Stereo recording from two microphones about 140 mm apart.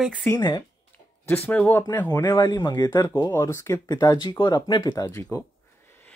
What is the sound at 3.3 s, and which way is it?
Speech, 20° left (ahead or behind).